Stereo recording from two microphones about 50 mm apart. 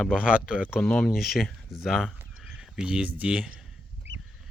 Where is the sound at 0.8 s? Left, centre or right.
Centre.